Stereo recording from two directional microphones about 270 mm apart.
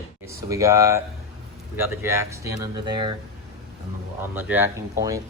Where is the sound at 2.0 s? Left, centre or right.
Centre.